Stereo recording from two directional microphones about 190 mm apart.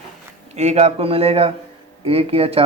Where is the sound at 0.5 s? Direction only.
35° right (ahead or behind).